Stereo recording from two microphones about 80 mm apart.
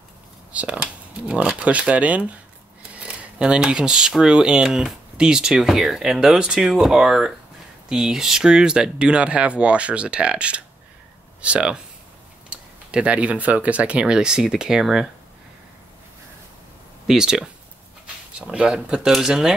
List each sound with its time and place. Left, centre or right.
0.5 s speech: centre
12.9 s speech: centre
17.1 s speech: centre